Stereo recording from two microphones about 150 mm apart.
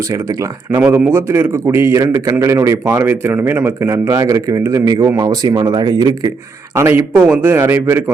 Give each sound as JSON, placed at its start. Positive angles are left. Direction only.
{"t": 0.1, "sound": "speech", "side_deg": -25}
{"t": 0.8, "sound": "a man's voice", "side_deg": -10}
{"t": 6.7, "sound": "a man's voice", "side_deg": -15}